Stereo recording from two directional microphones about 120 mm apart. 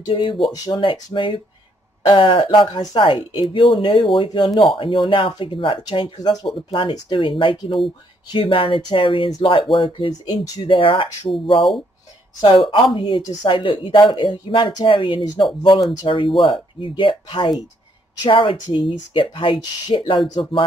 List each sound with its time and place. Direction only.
0.0 s speech: 40° left (ahead or behind)
6.7 s speech: 45° left (ahead or behind)
12.6 s speech: 45° left (ahead or behind)